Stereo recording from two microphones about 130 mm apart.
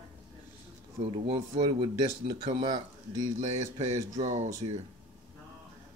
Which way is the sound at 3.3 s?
60° right (ahead or behind).